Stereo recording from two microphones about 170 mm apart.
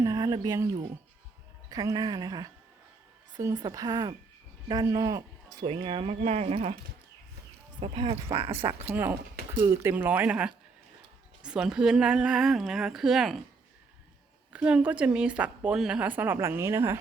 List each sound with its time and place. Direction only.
0.0 s speech: 20° right (ahead or behind); by 6.7 s 35° right (ahead or behind)
7.9 s speech: 35° right (ahead or behind)
8.6 s a woman's voice: 20° right (ahead or behind); by 13.4 s centre (ahead or behind)
14.5 s a woman's voice: 5° right (ahead or behind)